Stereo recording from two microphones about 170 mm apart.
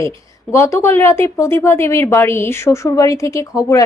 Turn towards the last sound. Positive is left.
turn(degrees=20)  # may be behind; listen again after turning